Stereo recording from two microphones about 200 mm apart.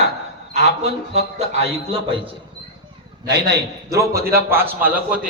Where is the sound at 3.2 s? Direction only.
60° right (ahead or behind).